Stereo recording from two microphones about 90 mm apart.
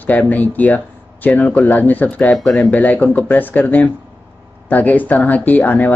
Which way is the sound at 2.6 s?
15° left (ahead or behind).